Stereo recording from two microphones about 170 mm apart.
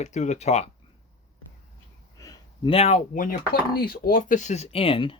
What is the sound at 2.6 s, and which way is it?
Speech, 35° left (ahead or behind).